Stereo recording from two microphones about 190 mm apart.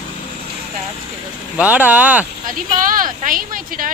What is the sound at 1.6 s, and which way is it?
Speech, 10° right (ahead or behind).